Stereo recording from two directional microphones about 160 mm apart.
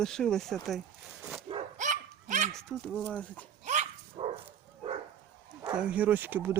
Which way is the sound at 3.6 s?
45° right (ahead or behind).